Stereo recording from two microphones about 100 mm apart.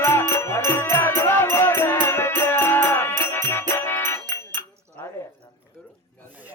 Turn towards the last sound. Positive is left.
turn(degrees=25)  # may be behind; listen again after turning